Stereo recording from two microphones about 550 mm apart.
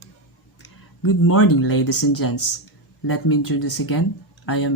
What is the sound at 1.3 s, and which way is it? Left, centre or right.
Speech, left.